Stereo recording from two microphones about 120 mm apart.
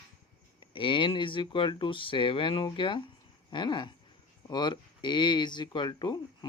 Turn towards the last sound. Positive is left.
turn(degrees=40)  # may be behind; listen again after turning